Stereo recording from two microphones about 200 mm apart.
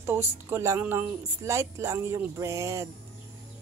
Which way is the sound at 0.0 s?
10° right (ahead or behind).